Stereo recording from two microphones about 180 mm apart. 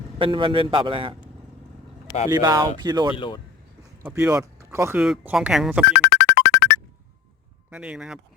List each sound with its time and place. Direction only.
0.2 s a man's voice: 30° right (ahead or behind)
2.3 s a man's voice: 20° right (ahead or behind)
3.2 s speech: 25° left (ahead or behind)
4.0 s speech: 10° right (ahead or behind)
6.0 s music: 70° left (ahead or behind)
7.7 s speech: 5° right (ahead or behind)